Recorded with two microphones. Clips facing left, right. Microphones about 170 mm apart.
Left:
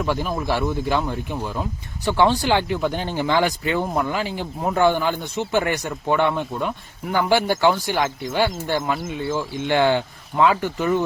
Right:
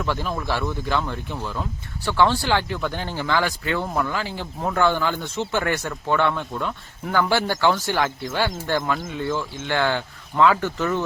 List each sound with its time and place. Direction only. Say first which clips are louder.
0.0 s speech: left 3 dB; 15° left (ahead or behind)